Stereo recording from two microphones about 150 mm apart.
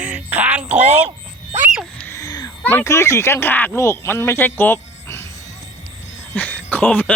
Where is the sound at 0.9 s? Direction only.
40° right (ahead or behind).